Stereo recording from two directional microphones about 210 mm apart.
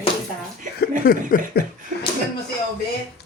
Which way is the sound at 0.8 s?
45° left (ahead or behind).